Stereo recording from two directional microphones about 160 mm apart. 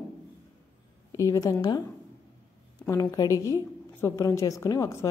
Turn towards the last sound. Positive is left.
turn(degrees=20)  # may be behind; listen again after turning